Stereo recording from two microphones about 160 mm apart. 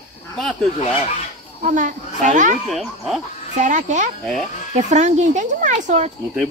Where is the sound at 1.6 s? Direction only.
50° right (ahead or behind).